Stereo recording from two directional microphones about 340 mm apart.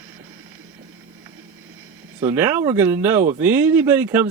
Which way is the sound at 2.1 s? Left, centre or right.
Centre.